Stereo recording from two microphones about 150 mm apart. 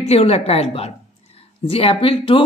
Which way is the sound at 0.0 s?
45° left (ahead or behind).